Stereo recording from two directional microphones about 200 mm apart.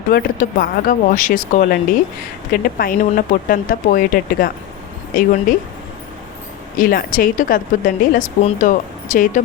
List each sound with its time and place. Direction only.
0.1 s speech: 45° left (ahead or behind)
6.7 s speech: 45° left (ahead or behind)